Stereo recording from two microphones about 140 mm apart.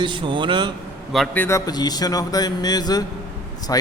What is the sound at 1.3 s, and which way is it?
A man's voice, 15° left (ahead or behind).